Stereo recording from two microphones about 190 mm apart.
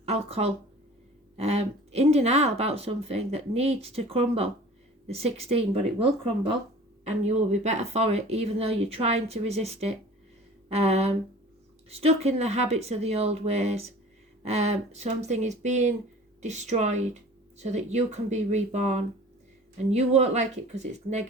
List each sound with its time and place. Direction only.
0.0 s speech: 35° right (ahead or behind)